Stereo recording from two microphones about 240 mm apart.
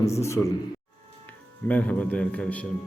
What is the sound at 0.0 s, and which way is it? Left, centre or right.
Speech, centre.